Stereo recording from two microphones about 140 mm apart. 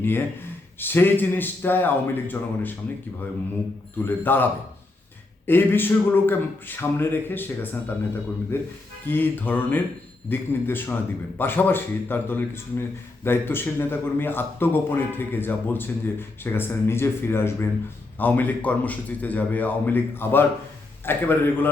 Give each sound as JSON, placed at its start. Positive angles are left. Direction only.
{"t": 0.0, "sound": "a man's voice", "side_deg": 15}
{"t": 4.0, "sound": "a man's voice", "side_deg": 15}
{"t": 5.5, "sound": "a man's voice", "side_deg": 15}